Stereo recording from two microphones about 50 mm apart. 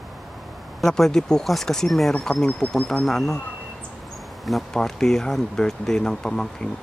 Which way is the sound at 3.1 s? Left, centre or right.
Centre.